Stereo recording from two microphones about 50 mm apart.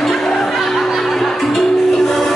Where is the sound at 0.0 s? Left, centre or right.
Centre.